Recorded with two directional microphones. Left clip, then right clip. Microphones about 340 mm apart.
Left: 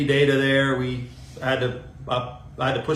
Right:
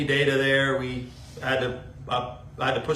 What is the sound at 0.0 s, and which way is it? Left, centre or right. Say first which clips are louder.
Speech: left 3 dB; centre.